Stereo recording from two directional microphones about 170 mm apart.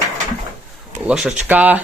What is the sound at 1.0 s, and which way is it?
Speech, 5° right (ahead or behind).